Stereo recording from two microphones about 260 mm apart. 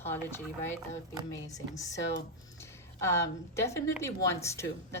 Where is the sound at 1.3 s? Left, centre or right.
Centre.